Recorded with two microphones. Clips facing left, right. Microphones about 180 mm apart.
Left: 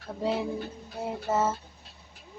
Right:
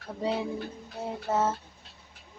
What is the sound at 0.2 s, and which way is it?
Speech, centre (ahead or behind).